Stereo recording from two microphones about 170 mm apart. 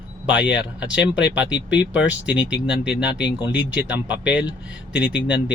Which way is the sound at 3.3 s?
25° left (ahead or behind).